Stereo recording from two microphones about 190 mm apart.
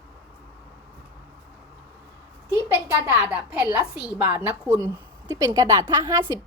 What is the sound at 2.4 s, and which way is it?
A woman's voice, 10° right (ahead or behind).